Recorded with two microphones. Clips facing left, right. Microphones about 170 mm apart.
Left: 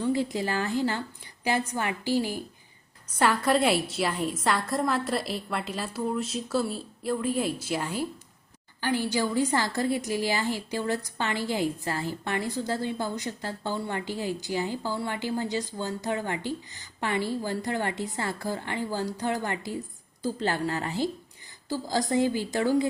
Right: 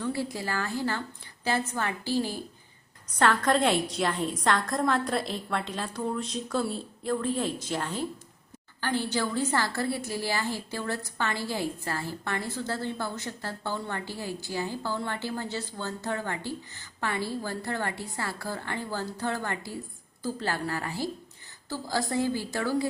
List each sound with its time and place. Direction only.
0.0 s a woman's voice: 20° left (ahead or behind)